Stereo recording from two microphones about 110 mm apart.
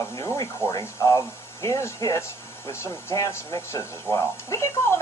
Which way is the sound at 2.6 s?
25° left (ahead or behind).